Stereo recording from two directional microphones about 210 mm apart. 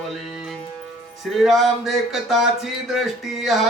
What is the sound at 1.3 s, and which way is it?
Speech, centre (ahead or behind).